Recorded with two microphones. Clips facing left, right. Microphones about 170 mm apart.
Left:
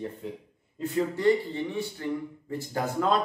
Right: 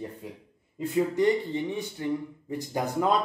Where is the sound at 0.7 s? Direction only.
20° right (ahead or behind).